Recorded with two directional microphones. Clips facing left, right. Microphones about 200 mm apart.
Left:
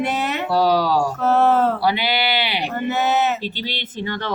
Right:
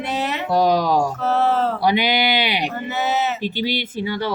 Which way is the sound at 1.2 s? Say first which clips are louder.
Left 3 dB; 50° left (ahead or behind).